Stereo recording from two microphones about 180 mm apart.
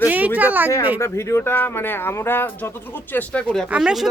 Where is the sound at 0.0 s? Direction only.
10° right (ahead or behind).